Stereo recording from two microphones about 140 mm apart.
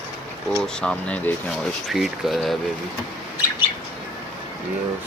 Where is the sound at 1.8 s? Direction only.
Centre (ahead or behind).